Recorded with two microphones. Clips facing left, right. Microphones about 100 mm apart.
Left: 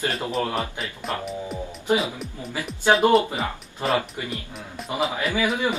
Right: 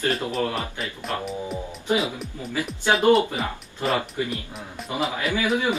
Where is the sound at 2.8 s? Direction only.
35° left (ahead or behind).